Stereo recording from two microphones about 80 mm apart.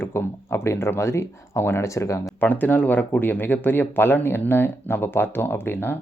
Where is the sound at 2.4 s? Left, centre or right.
Left.